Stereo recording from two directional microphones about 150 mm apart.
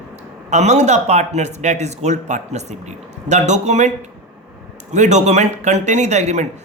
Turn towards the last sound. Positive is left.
turn(degrees=-50)  # may be behind; listen again after turning